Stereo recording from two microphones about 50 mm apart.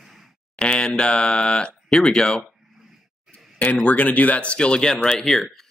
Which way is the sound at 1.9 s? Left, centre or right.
Centre.